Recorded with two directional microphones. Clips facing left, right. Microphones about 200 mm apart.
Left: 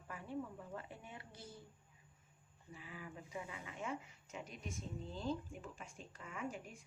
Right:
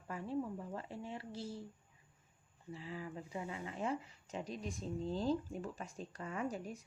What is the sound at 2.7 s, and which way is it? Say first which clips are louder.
Speech: right 6 dB; 30° right (ahead or behind).